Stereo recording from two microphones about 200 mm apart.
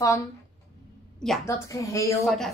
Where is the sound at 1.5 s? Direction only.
15° left (ahead or behind).